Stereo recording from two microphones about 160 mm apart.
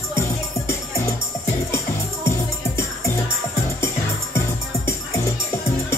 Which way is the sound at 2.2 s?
15° left (ahead or behind).